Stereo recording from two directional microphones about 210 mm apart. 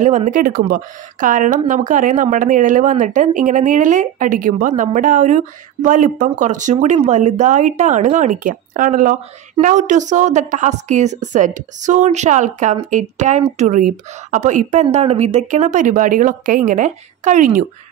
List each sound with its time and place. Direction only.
0.0 s speech: 35° right (ahead or behind)